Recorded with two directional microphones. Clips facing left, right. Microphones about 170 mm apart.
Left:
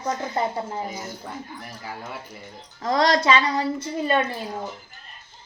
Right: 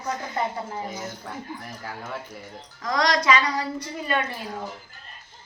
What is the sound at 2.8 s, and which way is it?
A woman's voice, 30° left (ahead or behind).